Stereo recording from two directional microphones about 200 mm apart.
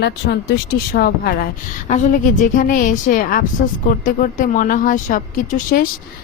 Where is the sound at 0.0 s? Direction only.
55° left (ahead or behind).